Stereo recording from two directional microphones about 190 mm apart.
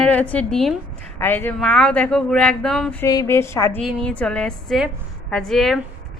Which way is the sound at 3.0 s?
15° left (ahead or behind).